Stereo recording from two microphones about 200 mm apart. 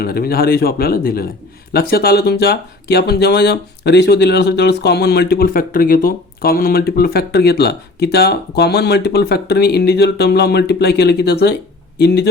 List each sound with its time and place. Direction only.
0.0 s speech: 50° left (ahead or behind)